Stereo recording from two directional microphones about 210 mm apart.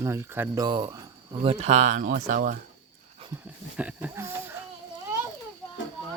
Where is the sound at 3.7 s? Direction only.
5° right (ahead or behind).